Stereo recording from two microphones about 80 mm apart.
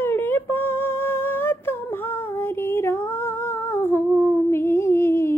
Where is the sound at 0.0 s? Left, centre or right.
Left.